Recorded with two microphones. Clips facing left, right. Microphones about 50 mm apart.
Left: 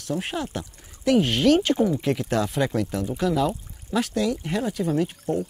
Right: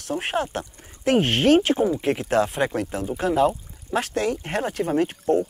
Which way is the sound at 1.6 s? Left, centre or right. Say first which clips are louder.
Right 1 dB; right.